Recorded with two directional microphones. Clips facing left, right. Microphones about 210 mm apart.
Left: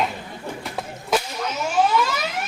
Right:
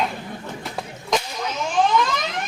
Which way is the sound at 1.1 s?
10° left (ahead or behind).